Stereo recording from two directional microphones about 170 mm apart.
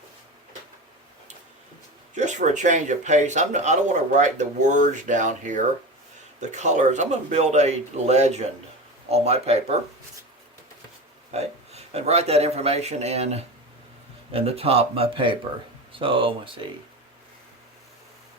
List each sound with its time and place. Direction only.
2.1 s speech: 45° right (ahead or behind)
11.3 s speech: 40° right (ahead or behind)